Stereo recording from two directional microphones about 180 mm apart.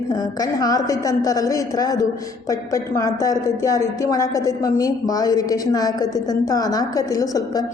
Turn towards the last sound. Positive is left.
turn(degrees=20)  # may be behind; listen again after turning